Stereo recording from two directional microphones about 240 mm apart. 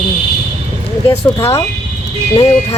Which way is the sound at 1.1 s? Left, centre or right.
Centre.